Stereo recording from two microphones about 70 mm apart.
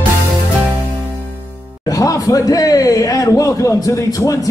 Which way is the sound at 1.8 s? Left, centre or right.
Left.